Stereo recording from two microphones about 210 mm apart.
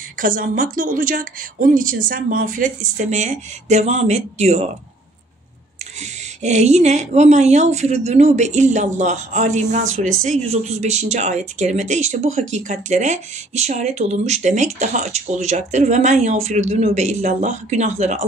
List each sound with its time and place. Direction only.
0.2 s a woman's voice: 40° right (ahead or behind)
6.4 s a woman's voice: 35° right (ahead or behind)